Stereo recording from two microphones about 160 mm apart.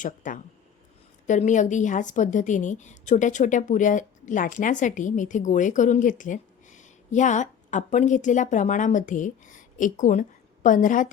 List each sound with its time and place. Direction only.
0.0 s a woman's voice: 55° left (ahead or behind)